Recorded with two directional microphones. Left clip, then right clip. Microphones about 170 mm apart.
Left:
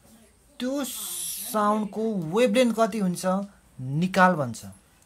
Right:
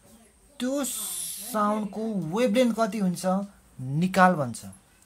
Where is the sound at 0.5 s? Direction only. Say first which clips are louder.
Even; 5° left (ahead or behind).